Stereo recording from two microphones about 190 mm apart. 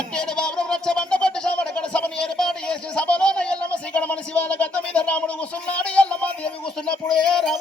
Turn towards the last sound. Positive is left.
turn(degrees=0)  # may be behind; listen again after turning